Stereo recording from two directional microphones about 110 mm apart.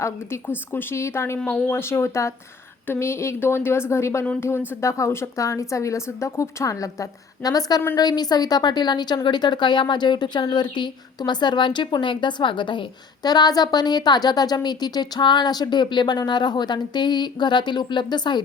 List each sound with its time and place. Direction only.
0.0 s speech: 20° left (ahead or behind)
1.4 s speech: 10° left (ahead or behind)
1.7 s speech: 20° left (ahead or behind); by 18.4 s 40° left (ahead or behind)